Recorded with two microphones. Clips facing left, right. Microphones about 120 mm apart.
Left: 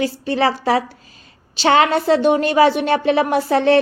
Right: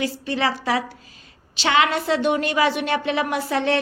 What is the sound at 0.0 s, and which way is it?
A woman's voice, 35° left (ahead or behind).